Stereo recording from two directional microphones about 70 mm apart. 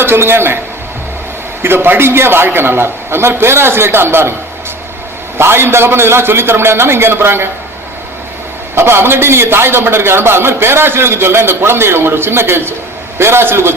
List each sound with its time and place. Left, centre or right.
0.0 s a man's voice: right
1.6 s a man's voice: right
5.4 s a man's voice: right
8.7 s a man's voice: right